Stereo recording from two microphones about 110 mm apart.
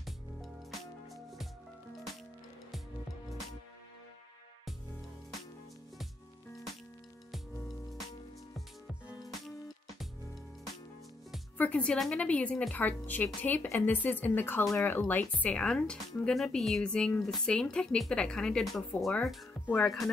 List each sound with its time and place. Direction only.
9.2 s music: centre (ahead or behind)
11.5 s speech: 15° left (ahead or behind)
19.6 s speech: 15° left (ahead or behind)